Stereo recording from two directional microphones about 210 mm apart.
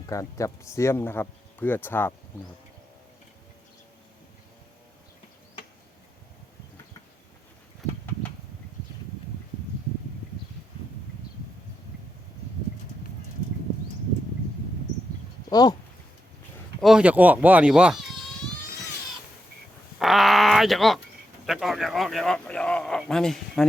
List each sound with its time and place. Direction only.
0.1 s speech: 15° left (ahead or behind)
15.4 s a sound: 20° left (ahead or behind)
16.8 s speech: 5° right (ahead or behind)
20.0 s groan: centre (ahead or behind)
21.4 s speech: centre (ahead or behind)